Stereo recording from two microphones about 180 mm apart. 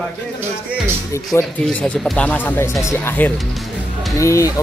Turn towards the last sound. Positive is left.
turn(degrees=15)  # may be behind; listen again after turning